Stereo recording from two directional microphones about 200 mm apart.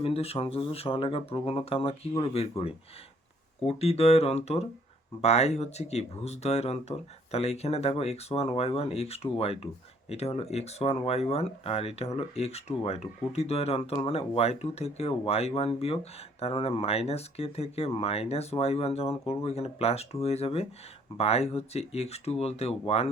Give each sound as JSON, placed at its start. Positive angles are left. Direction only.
{"t": 0.0, "sound": "speech", "side_deg": 30}